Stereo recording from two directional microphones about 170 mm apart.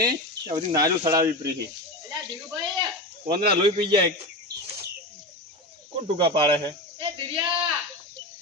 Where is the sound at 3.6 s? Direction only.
30° right (ahead or behind).